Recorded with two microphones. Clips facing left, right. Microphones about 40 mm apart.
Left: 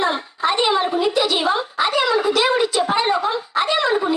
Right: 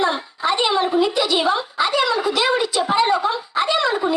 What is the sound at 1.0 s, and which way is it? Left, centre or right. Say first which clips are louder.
Speech: even; left.